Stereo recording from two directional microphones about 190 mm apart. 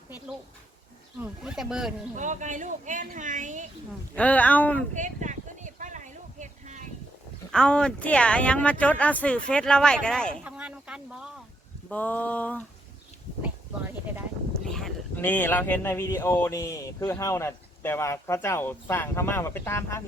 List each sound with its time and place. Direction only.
1.2 s speech: 5° right (ahead or behind)
2.1 s speech: 40° right (ahead or behind)
4.1 s speech: 5° left (ahead or behind)
4.9 s a sound: 40° right (ahead or behind)
7.5 s speech: 5° left (ahead or behind)
10.4 s a sound: 5° right (ahead or behind)
11.9 s speech: 5° left (ahead or behind)
14.7 s speech: centre (ahead or behind)